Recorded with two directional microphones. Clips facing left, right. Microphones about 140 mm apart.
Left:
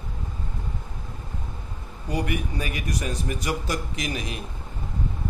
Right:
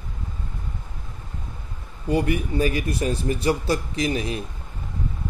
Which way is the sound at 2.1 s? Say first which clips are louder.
Right 5 dB; 30° right (ahead or behind).